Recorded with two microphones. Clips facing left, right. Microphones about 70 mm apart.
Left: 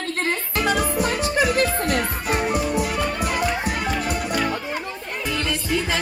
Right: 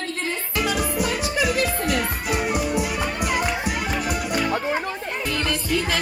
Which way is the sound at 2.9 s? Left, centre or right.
Centre.